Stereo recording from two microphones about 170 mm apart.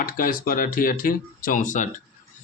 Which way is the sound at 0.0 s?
55° left (ahead or behind).